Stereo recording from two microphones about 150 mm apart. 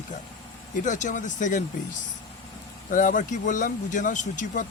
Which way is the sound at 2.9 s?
60° left (ahead or behind).